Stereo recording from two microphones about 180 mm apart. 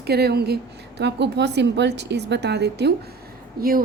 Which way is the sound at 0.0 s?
65° right (ahead or behind).